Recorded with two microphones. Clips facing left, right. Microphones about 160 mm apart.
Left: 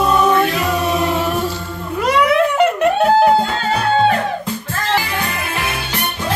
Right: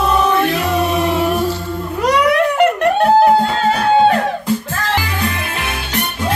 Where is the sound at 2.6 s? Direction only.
Centre (ahead or behind).